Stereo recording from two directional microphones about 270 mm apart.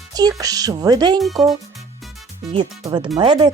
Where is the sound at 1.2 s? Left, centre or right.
Centre.